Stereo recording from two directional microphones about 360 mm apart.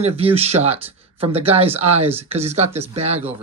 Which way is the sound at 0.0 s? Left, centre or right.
Centre.